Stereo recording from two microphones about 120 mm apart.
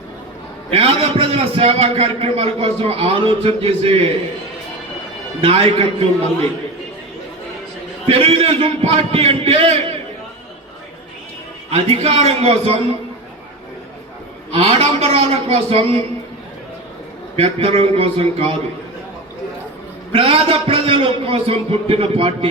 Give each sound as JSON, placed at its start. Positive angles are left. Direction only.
{"t": 0.7, "sound": "a man's voice", "side_deg": -55}
{"t": 5.4, "sound": "a man's voice", "side_deg": -55}
{"t": 8.0, "sound": "a man's voice", "side_deg": -55}
{"t": 11.7, "sound": "a man's voice", "side_deg": -60}
{"t": 14.5, "sound": "a man's voice", "side_deg": -60}
{"t": 17.3, "sound": "a man's voice", "side_deg": -55}
{"t": 20.1, "sound": "a man's voice", "side_deg": -50}